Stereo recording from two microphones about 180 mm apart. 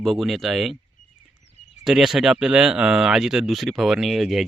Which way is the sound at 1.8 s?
Centre (ahead or behind).